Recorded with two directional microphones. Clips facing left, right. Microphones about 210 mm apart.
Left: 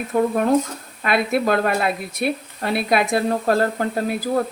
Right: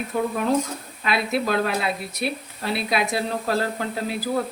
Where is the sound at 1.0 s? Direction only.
55° left (ahead or behind).